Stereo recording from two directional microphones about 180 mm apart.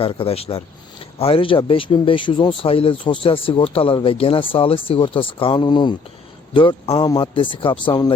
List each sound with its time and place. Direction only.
0.0 s speech: 30° left (ahead or behind)